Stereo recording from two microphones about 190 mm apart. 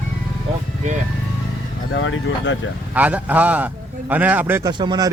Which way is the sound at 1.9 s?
90° left.